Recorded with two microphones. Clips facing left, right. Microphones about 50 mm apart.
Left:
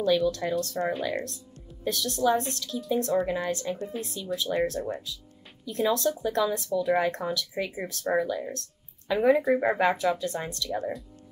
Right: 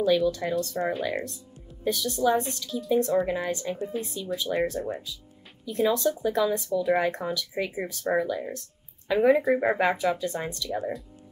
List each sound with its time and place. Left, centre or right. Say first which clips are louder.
0.0 s speech: right 1 dB; centre